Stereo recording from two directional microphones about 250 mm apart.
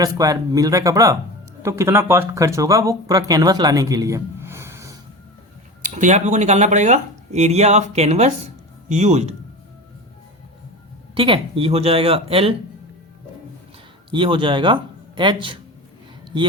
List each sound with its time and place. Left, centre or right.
0.0 s speech: centre
5.8 s speech: right
11.1 s speech: right
14.1 s speech: centre